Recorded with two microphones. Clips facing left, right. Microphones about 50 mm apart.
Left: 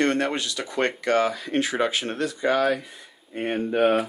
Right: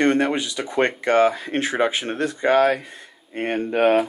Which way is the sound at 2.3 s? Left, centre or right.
Right.